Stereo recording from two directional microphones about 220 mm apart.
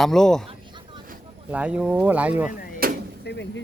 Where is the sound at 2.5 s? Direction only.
40° left (ahead or behind).